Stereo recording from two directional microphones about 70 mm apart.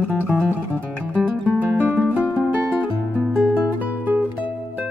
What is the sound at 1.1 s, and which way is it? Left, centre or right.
Music, right.